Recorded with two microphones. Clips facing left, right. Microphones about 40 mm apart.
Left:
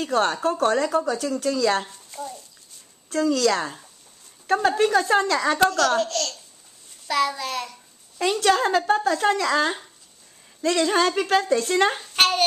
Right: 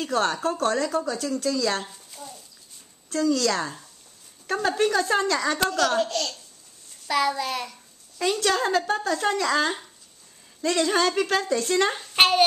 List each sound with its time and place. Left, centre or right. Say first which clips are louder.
0.0 s speech: left 2 dB; centre
1.9 s a sound: left 7 dB; centre
3.3 s speech: left 3 dB; centre
5.7 s speech: left 2 dB; centre
7.1 s child singing: even; centre
8.2 s speech: left 3 dB; centre
12.2 s speech: right 2 dB; centre